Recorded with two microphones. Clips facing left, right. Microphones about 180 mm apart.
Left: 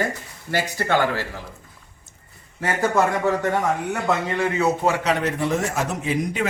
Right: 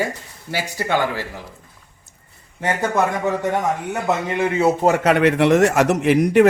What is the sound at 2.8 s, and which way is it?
Speech, 15° right (ahead or behind).